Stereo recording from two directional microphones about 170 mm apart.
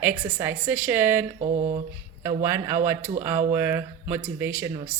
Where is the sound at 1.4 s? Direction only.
40° right (ahead or behind).